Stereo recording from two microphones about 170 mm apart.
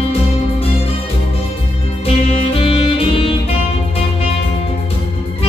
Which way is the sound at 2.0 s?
35° left (ahead or behind).